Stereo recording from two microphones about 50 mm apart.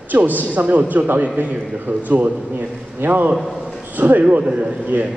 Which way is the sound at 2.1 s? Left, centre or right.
Right.